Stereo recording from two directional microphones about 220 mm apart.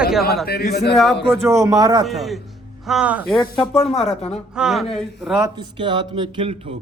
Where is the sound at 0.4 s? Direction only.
45° left (ahead or behind).